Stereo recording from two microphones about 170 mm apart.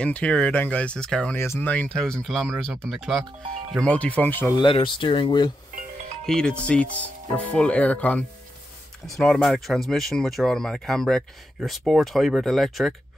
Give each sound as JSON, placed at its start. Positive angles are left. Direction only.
{"t": 0.0, "sound": "speech", "side_deg": 5}
{"t": 4.6, "sound": "speech", "side_deg": 30}
{"t": 6.2, "sound": "speech", "side_deg": 5}